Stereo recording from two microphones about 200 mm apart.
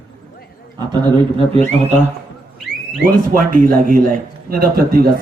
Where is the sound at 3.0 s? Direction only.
45° right (ahead or behind).